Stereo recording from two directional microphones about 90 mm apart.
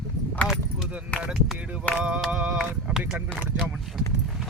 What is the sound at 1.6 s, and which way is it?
Speech, 15° right (ahead or behind).